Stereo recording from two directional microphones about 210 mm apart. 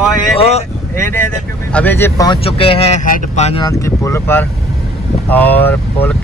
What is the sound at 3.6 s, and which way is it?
Speech, 15° left (ahead or behind).